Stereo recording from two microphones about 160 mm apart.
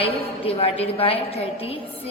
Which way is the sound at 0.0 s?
35° left (ahead or behind).